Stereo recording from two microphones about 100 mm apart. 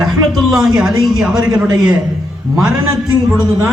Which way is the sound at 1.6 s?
45° right (ahead or behind).